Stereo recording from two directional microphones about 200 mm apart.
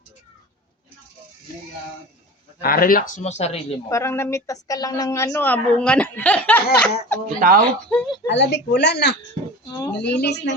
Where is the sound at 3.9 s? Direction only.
15° left (ahead or behind).